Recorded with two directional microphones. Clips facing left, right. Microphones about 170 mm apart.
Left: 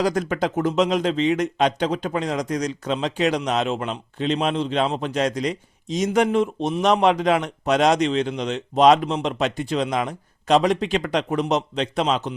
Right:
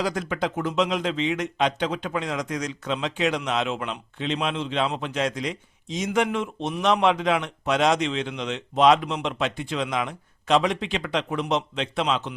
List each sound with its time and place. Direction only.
0.0 s a man's voice: 45° left (ahead or behind)